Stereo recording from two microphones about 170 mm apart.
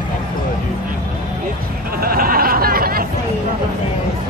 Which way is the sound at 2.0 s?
60° right (ahead or behind).